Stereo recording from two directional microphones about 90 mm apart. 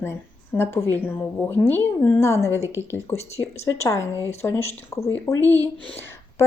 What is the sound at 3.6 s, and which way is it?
Speech, 30° left (ahead or behind).